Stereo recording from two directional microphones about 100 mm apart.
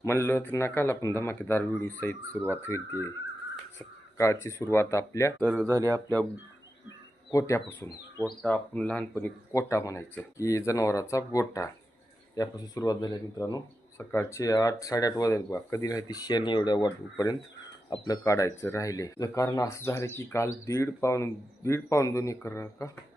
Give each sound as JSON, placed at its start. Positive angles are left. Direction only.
{"t": 0.0, "sound": "speech", "side_deg": 25}
{"t": 4.2, "sound": "speech", "side_deg": 30}
{"t": 5.4, "sound": "speech", "side_deg": -10}
{"t": 5.6, "sound": "speech", "side_deg": -35}
{"t": 7.3, "sound": "speech", "side_deg": 30}
{"t": 8.4, "sound": "speech", "side_deg": 15}
{"t": 9.2, "sound": "speech", "side_deg": 30}
{"t": 14.0, "sound": "speech", "side_deg": 25}